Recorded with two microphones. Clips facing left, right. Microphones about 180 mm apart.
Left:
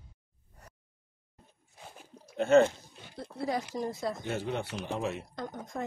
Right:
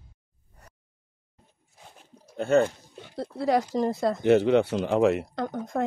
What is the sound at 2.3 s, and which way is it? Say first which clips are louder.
Speech: even; 40° right (ahead or behind).